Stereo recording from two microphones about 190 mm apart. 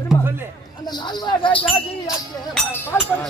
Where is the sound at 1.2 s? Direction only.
25° left (ahead or behind).